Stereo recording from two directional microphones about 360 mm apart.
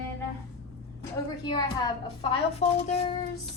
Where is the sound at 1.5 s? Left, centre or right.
Centre.